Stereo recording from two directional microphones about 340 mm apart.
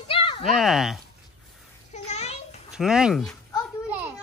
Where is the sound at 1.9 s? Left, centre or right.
Centre.